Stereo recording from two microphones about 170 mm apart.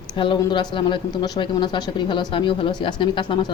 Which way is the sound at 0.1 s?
30° left (ahead or behind).